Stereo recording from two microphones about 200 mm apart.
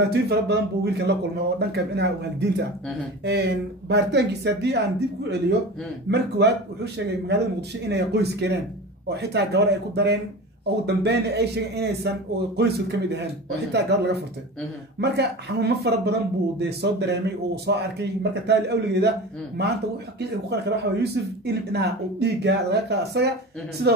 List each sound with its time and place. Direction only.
0.0 s a man's voice: 55° right (ahead or behind)
6.0 s a man's voice: 55° right (ahead or behind)